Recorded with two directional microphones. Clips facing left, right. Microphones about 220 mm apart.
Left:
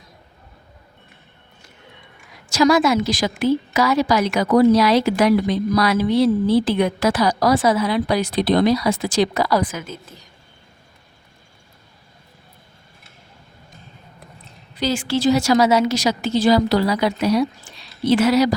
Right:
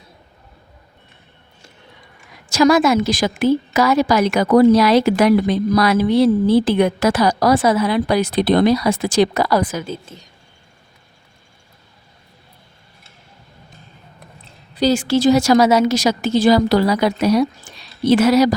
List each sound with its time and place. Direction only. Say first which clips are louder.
2.6 s a woman's voice: right 2 dB; 50° right (ahead or behind)
9.8 s a woman's voice: right 6 dB; 30° right (ahead or behind)
14.8 s a woman's voice: right 5 dB; 40° right (ahead or behind)